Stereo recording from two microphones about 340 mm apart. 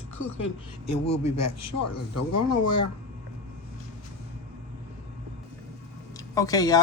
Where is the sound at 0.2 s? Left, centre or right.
Left.